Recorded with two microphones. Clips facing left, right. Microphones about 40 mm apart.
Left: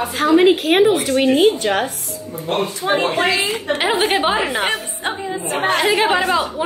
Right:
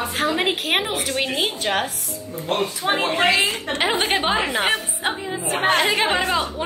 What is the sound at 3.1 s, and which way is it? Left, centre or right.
Speech, right.